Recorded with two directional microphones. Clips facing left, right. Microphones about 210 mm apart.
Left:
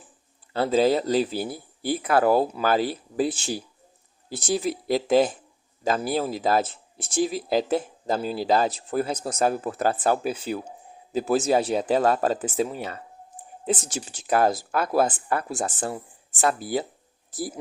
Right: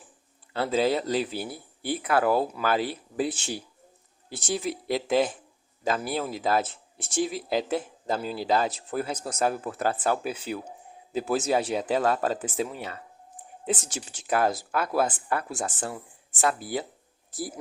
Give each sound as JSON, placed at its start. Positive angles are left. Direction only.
{"t": 0.5, "sound": "speech", "side_deg": 40}